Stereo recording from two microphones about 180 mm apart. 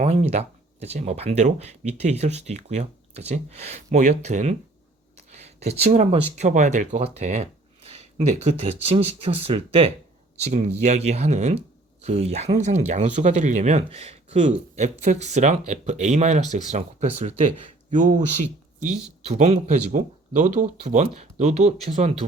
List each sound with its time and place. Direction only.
0.0 s speech: 40° right (ahead or behind)